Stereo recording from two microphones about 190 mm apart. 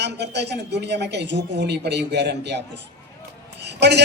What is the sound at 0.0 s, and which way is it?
A man's voice, 65° right (ahead or behind).